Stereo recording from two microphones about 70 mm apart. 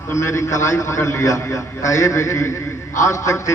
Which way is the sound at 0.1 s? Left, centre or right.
Left.